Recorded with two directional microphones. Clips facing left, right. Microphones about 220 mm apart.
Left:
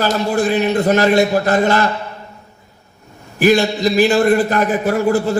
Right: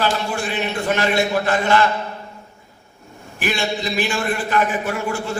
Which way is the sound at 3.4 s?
40° left (ahead or behind).